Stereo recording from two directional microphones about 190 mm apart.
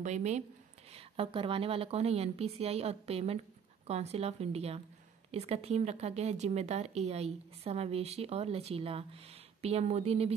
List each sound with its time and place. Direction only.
0.0 s speech: 40° right (ahead or behind)